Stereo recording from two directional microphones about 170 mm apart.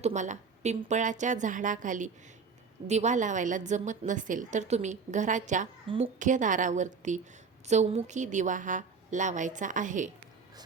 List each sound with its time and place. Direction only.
0.0 s a woman's voice: 45° right (ahead or behind)